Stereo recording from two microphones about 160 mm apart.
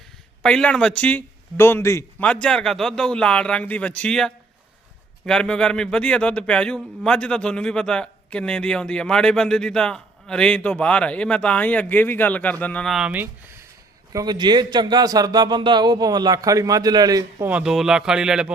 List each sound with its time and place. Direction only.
0.4 s a man's voice: 5° left (ahead or behind)
2.2 s speech: 5° left (ahead or behind)
14.1 s a man's voice: 25° right (ahead or behind)
17.5 s speech: 5° right (ahead or behind)